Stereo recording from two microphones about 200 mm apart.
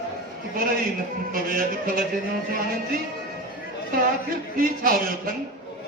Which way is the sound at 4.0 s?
45° right (ahead or behind).